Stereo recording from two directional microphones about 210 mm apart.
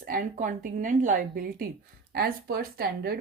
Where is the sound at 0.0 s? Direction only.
40° right (ahead or behind).